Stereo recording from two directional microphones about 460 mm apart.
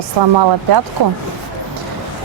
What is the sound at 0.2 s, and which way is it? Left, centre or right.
Speech, right.